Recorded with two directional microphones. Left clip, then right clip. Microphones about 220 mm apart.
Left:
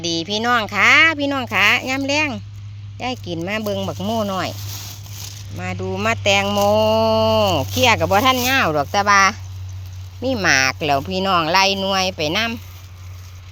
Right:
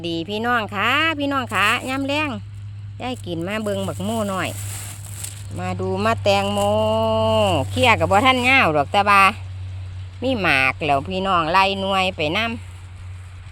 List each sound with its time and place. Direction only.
0.0 s speech: centre (ahead or behind)
5.5 s speech: 5° right (ahead or behind)
6.5 s a sound: 15° left (ahead or behind)
7.4 s speech: 5° left (ahead or behind)